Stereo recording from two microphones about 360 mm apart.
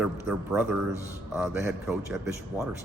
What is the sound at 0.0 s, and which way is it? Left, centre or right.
A man's voice, centre.